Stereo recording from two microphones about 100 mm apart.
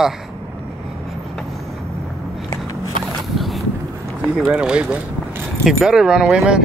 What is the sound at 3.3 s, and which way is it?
Boat, centre (ahead or behind).